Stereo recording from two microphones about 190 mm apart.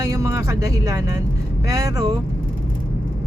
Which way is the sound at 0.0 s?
15° right (ahead or behind).